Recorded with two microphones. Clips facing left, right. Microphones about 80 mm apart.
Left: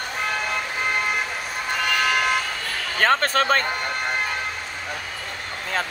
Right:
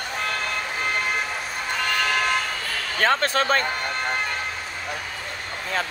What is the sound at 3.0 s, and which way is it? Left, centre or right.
Speech, left.